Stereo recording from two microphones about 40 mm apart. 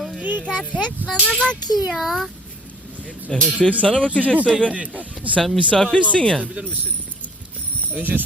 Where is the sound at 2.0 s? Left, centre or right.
Centre.